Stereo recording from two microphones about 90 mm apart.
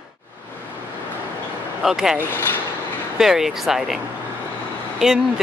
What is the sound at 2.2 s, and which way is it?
Speech, 25° left (ahead or behind).